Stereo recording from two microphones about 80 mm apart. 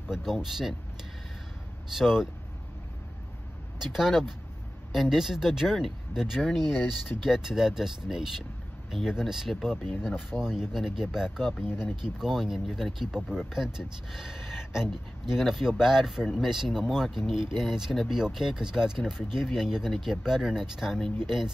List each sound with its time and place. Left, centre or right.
0.1 s speech: centre
2.0 s speech: centre
3.8 s speech: centre
11.6 s speech: left
12.0 s speech: centre